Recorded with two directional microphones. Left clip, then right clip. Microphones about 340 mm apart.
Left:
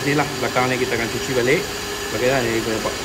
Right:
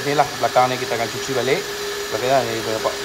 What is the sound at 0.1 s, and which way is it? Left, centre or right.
Speech, centre.